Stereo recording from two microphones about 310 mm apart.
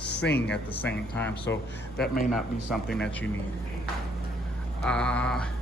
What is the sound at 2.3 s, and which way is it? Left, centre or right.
Speech, centre.